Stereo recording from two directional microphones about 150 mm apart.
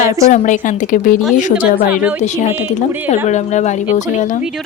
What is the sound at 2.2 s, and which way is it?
Speech, 50° left (ahead or behind).